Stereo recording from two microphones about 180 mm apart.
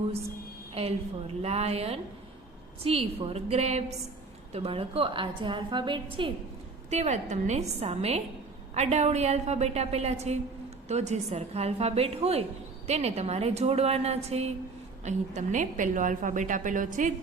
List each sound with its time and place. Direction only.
0.7 s a woman's voice: 35° right (ahead or behind)
6.9 s a woman's voice: 40° right (ahead or behind)